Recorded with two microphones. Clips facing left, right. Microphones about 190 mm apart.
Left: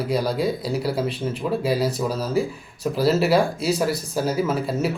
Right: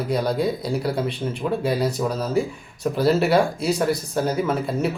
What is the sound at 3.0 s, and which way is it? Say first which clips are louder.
A man's voice: even; centre (ahead or behind).